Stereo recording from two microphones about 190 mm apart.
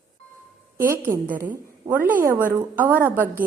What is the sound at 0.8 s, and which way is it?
A woman's voice, 10° right (ahead or behind).